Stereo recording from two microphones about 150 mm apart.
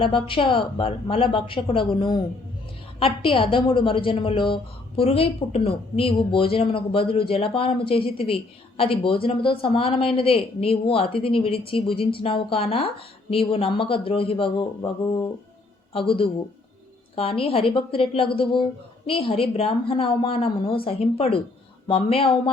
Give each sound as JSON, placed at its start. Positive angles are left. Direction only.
{"t": 0.0, "sound": "speech", "side_deg": 35}
{"t": 15.9, "sound": "speech", "side_deg": 35}